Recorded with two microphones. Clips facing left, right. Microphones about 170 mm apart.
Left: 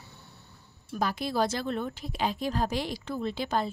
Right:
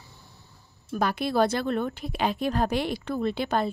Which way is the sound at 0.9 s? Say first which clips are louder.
Right 4 dB; 65° right (ahead or behind).